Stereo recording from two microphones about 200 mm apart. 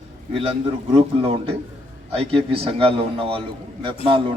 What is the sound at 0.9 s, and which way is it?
Speech, 30° right (ahead or behind).